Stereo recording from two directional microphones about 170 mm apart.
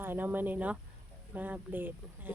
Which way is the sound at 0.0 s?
10° right (ahead or behind).